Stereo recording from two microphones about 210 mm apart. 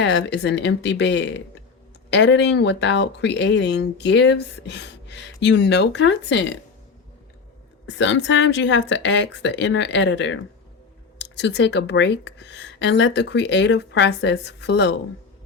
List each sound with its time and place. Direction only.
0.0 s speech: 55° left (ahead or behind)
7.9 s speech: 60° left (ahead or behind)